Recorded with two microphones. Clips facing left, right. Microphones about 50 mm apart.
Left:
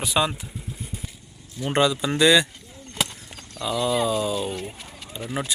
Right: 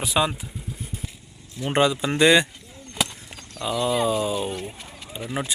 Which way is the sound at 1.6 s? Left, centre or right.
Right.